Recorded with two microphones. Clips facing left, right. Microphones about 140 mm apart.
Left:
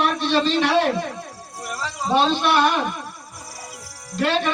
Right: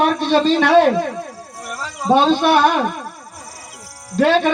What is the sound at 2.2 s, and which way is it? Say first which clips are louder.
Speech: right 4 dB; 50° right (ahead or behind).